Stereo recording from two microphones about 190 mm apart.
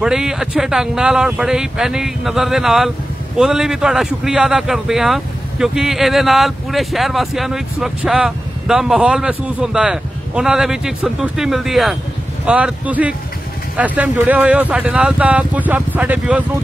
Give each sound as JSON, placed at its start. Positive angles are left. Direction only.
{"t": 0.0, "sound": "a man's voice", "side_deg": -5}